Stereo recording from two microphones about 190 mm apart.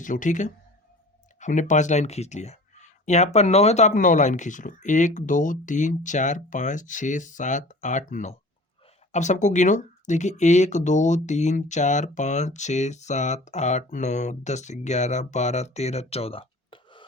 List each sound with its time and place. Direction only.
0.0 s speech: 40° left (ahead or behind)